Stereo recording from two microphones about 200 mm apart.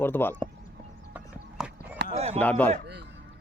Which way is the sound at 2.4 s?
10° left (ahead or behind).